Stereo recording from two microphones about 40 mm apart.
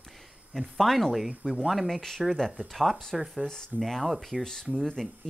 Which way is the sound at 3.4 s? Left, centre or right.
Centre.